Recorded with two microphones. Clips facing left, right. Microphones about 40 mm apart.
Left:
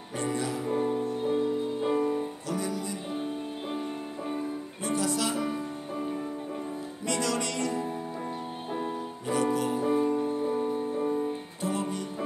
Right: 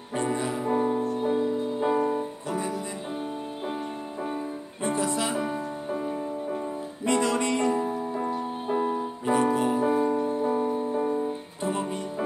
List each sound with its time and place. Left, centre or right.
0.1 s music: right
0.7 s music: centre
2.4 s music: right
4.8 s music: right
7.1 s music: right
8.6 s music: centre
8.9 s music: right
9.8 s music: centre
11.6 s music: right